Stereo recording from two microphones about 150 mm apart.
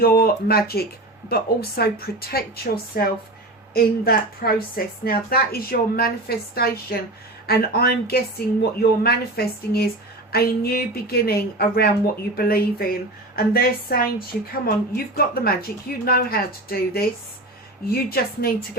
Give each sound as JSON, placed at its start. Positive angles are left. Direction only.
{"t": 0.0, "sound": "a woman's voice", "side_deg": 85}